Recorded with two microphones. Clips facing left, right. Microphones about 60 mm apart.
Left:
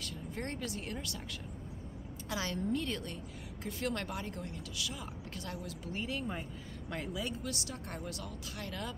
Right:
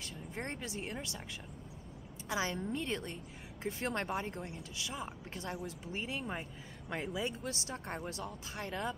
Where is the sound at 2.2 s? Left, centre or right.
Right.